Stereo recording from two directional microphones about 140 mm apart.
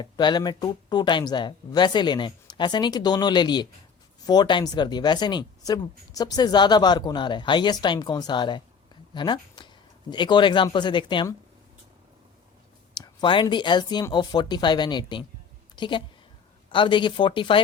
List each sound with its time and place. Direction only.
0.0 s speech: 30° left (ahead or behind)
12.9 s a woman's voice: 35° left (ahead or behind)